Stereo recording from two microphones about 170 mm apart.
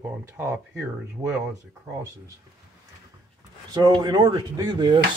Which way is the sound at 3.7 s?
20° right (ahead or behind).